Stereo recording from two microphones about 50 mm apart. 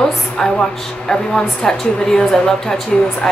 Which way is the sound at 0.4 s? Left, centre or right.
Centre.